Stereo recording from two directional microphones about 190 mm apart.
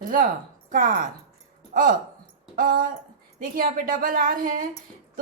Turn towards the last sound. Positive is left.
turn(degrees=-45)  # may be behind; listen again after turning